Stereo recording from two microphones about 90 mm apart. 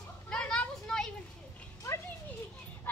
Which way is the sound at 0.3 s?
10° left (ahead or behind).